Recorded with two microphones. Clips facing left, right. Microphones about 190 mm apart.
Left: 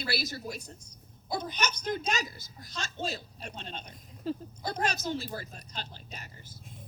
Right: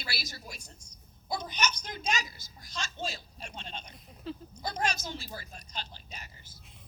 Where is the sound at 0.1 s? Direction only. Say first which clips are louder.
Left 8 dB; 60° left (ahead or behind).